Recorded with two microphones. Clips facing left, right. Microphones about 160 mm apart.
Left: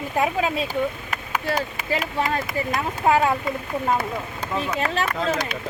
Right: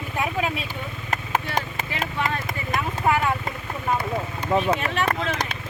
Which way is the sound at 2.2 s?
35° left (ahead or behind).